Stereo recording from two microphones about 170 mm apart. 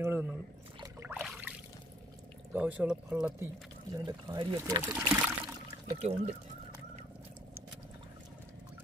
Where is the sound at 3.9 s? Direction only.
25° right (ahead or behind).